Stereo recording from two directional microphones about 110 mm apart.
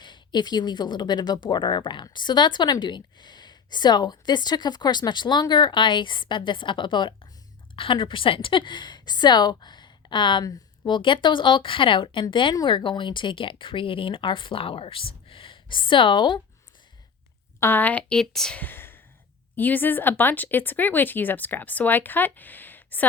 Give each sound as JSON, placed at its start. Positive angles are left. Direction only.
{"t": 0.0, "sound": "speech", "side_deg": 45}
{"t": 17.6, "sound": "speech", "side_deg": 20}